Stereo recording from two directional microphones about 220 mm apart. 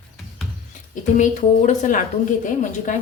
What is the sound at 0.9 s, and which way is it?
A woman's voice, 35° left (ahead or behind).